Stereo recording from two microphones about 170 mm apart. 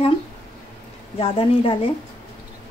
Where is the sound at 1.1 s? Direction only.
30° left (ahead or behind).